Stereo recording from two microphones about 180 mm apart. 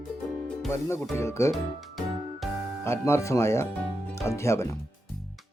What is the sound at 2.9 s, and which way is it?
Speech, 15° left (ahead or behind).